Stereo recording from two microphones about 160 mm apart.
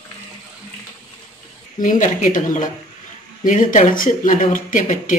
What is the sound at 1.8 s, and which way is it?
Speech, 55° left (ahead or behind).